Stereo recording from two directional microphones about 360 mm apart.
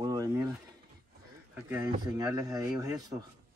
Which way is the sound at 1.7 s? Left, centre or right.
Centre.